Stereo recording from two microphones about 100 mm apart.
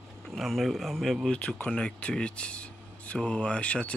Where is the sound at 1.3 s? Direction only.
15° left (ahead or behind).